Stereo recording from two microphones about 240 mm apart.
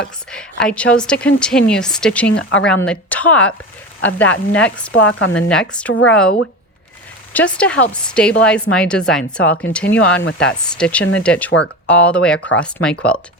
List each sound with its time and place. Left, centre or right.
0.0 s a woman's voice: centre
2.3 s speech: left
2.6 s a woman's voice: centre
7.3 s a woman's voice: centre